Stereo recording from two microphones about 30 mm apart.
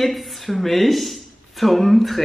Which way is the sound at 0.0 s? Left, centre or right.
Centre.